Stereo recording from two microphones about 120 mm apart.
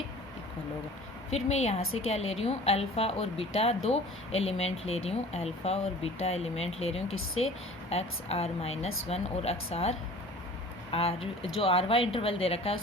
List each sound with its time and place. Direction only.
1.5 s a woman's voice: 70° left (ahead or behind)
10.9 s speech: 55° left (ahead or behind)